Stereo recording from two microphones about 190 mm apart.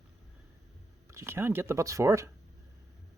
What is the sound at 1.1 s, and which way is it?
Speech, 15° right (ahead or behind).